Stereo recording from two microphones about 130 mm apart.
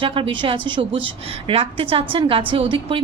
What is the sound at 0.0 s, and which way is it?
A woman's voice, 40° right (ahead or behind).